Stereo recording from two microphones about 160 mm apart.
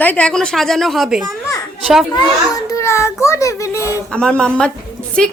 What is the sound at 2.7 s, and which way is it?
Speech, 15° left (ahead or behind).